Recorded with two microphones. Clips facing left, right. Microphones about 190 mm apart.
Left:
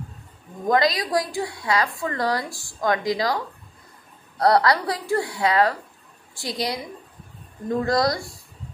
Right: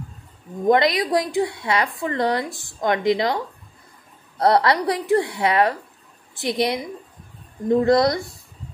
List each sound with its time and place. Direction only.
0.7 s a woman's voice: 25° right (ahead or behind)
7.8 s a woman's voice: 20° right (ahead or behind)